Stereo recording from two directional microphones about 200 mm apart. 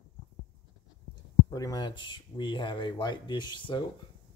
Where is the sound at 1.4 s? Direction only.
20° left (ahead or behind).